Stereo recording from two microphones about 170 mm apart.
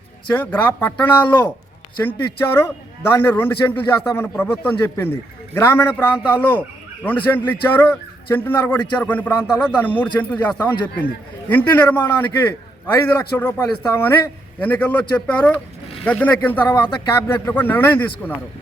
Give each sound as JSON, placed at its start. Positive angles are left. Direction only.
{"t": 0.3, "sound": "a man's voice", "side_deg": 10}